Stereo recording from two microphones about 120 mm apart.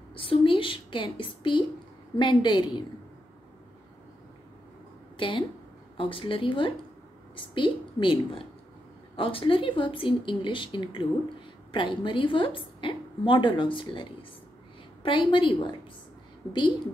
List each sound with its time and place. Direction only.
0.1 s a woman's voice: 45° left (ahead or behind)
5.1 s a sound: 45° left (ahead or behind)
5.9 s a woman's voice: 45° left (ahead or behind)
15.0 s a woman's voice: 45° left (ahead or behind)